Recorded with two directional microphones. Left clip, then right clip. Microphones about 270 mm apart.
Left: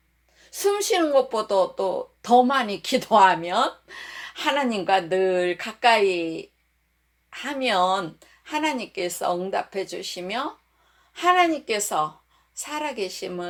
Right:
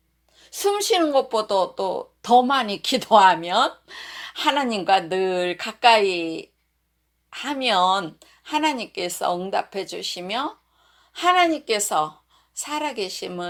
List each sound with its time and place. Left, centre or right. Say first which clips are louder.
0.3 s speech: right 1 dB; right
7.3 s speech: right 2 dB; right